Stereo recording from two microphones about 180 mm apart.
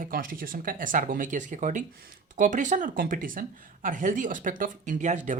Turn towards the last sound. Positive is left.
turn(degrees=-45)  # may be behind; listen again after turning